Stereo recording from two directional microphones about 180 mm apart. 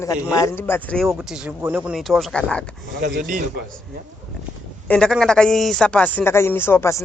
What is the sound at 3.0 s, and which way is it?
Speech, 65° right (ahead or behind).